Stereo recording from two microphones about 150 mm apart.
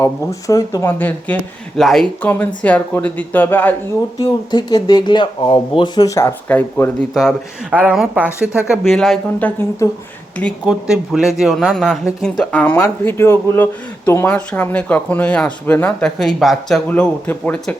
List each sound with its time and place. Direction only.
0.0 s speech: 20° left (ahead or behind)
1.8 s speech: centre (ahead or behind)
2.2 s speech: 10° left (ahead or behind)
4.2 s speech: 25° left (ahead or behind)
7.1 s speech: centre (ahead or behind)
7.7 s a woman's voice: 10° right (ahead or behind)
9.6 s speech: 20° left (ahead or behind)
10.3 s speech: 5° left (ahead or behind)
10.8 s speech: 5° right (ahead or behind)